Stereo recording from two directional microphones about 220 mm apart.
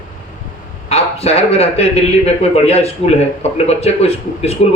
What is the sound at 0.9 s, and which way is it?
Speech, 30° left (ahead or behind).